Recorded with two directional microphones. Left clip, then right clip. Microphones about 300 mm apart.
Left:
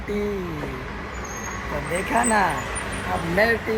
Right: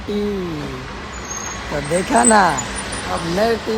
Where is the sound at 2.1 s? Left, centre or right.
Right.